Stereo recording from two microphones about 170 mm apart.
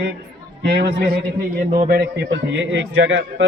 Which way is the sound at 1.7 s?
60° right (ahead or behind).